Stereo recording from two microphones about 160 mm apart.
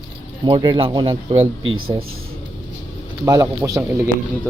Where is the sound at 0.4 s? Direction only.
30° right (ahead or behind).